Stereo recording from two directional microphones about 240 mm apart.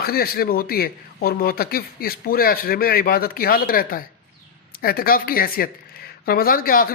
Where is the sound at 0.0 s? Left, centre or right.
Left.